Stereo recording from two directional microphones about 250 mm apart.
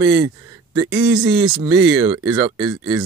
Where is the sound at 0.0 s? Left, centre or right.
Centre.